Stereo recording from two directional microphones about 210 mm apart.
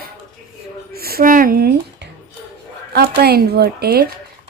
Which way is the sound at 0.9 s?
45° right (ahead or behind).